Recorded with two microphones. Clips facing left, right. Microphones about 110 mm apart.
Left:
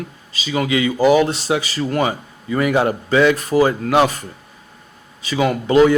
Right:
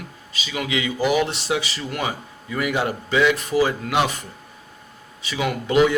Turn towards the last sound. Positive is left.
turn(degrees=40)  # may be behind; listen again after turning